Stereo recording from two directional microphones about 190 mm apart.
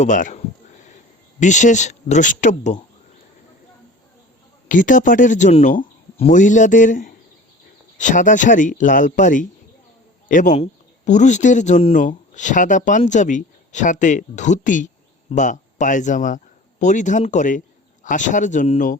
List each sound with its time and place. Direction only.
0.0 s speech: 40° left (ahead or behind)
4.7 s speech: 45° left (ahead or behind)